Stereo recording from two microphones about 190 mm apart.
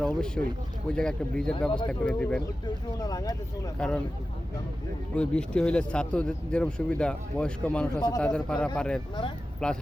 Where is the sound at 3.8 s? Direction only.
5° left (ahead or behind).